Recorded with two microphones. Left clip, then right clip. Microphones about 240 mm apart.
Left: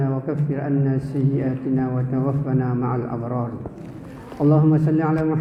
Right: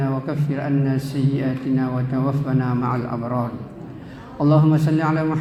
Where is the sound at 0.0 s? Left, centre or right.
Right.